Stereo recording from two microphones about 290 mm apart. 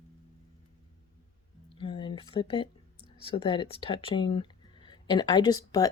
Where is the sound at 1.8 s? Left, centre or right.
Centre.